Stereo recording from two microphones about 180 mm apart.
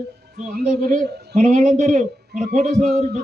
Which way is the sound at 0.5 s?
55° right (ahead or behind).